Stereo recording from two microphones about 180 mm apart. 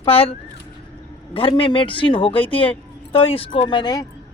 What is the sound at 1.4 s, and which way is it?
Speech, 30° left (ahead or behind).